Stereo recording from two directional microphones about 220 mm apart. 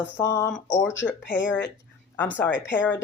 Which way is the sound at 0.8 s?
60° left (ahead or behind).